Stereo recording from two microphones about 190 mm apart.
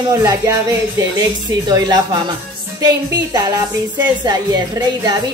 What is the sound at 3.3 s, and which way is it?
A woman's voice, 20° right (ahead or behind).